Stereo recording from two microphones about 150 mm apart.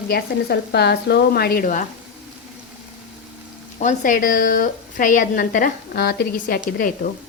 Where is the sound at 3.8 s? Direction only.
60° left (ahead or behind); by 6.6 s 80° left.